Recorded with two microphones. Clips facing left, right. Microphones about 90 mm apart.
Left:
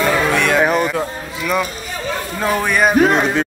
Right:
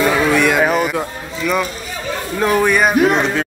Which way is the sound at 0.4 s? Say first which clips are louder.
Right 1 dB; 5° right (ahead or behind).